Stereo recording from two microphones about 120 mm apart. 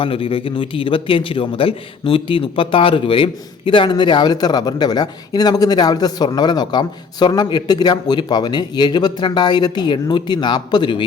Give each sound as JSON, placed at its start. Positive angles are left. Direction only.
{"t": 0.0, "sound": "a man's voice", "side_deg": 50}